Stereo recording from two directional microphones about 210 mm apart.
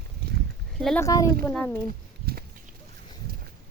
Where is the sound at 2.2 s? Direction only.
50° right (ahead or behind).